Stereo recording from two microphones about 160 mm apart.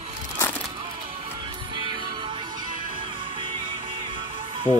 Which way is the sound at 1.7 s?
30° right (ahead or behind).